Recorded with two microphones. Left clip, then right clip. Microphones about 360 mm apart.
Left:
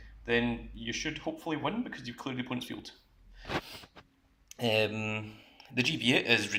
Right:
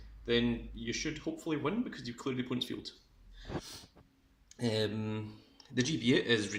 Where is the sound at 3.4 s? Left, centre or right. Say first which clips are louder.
Left 7 dB; left.